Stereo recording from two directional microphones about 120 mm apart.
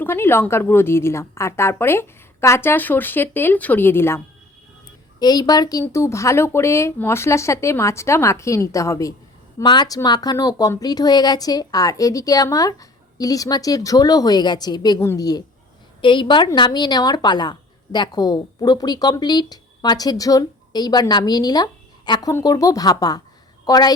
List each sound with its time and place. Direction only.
0.0 s a woman's voice: 20° left (ahead or behind)
5.2 s a woman's voice: 35° left (ahead or behind)
16.0 s a woman's voice: 45° left (ahead or behind)